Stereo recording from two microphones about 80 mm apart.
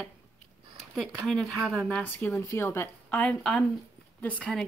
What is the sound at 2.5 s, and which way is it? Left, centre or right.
Speech, left.